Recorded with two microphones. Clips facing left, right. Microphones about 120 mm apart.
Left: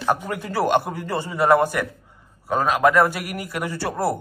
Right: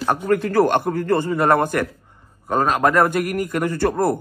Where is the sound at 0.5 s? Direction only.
50° right (ahead or behind).